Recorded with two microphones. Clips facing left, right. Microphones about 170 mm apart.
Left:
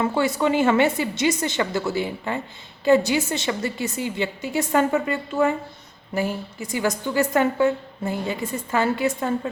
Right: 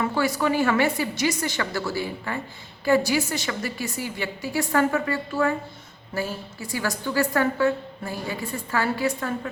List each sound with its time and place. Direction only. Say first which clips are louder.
0.0 s a woman's voice: left 2 dB; 25° left (ahead or behind)